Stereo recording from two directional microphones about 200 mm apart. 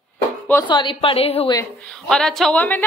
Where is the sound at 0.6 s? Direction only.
25° left (ahead or behind).